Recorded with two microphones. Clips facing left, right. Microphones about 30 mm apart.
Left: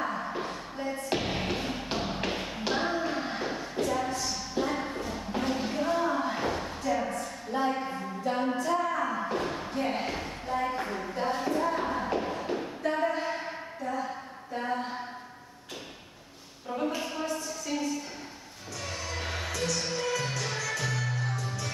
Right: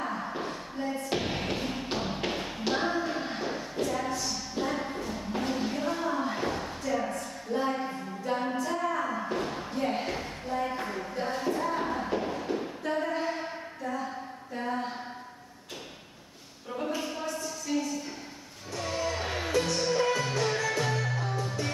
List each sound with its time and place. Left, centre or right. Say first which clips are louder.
0.0 s music: left 1 dB; centre
16.8 s a sound: left 1 dB; centre
18.8 s music: right 5 dB; centre
19.5 s music: right 6 dB; right